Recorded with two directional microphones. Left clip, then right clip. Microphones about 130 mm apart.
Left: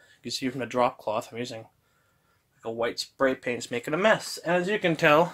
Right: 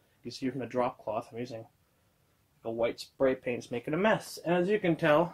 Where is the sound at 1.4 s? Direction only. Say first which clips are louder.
Left 4 dB; 20° left (ahead or behind).